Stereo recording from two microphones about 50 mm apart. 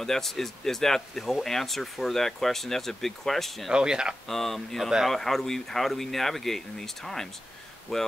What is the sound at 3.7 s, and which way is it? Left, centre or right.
Speech, centre.